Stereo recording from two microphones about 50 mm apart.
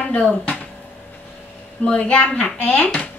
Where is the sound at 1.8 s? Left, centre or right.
Left.